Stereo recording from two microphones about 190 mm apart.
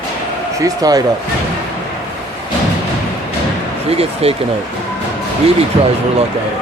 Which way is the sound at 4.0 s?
30° right (ahead or behind).